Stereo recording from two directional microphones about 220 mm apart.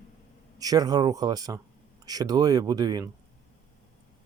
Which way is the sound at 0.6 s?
15° right (ahead or behind).